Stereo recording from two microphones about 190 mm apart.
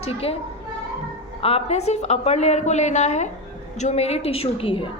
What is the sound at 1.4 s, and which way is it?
A woman's voice, 35° left (ahead or behind).